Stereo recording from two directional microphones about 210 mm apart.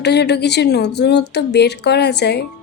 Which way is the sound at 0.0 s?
55° left (ahead or behind).